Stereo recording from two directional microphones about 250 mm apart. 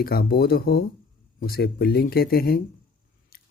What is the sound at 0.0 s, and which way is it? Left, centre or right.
Speech, left.